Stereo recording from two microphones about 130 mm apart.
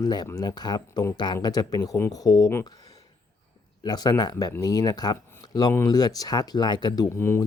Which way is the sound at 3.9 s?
30° left (ahead or behind).